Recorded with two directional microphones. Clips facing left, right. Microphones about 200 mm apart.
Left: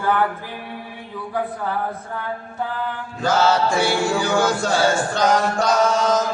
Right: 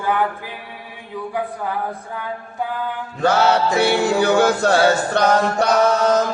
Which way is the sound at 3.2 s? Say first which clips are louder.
Right 2 dB; 60° right (ahead or behind).